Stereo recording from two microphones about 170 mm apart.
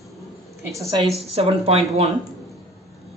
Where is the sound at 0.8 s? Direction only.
20° right (ahead or behind).